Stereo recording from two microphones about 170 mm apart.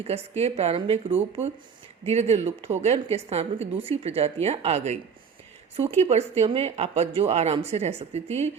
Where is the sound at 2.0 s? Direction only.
40° right (ahead or behind).